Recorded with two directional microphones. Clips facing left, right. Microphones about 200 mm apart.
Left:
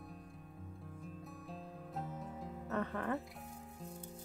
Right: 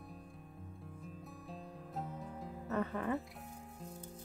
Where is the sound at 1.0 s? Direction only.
Centre (ahead or behind).